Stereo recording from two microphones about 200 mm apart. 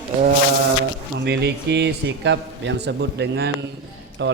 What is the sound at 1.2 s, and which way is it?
A man's voice, 55° right (ahead or behind).